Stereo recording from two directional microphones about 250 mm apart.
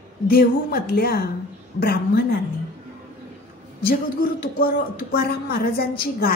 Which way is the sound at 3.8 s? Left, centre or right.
Left.